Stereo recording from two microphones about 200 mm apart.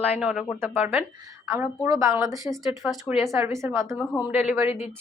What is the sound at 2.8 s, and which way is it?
Speech, centre (ahead or behind).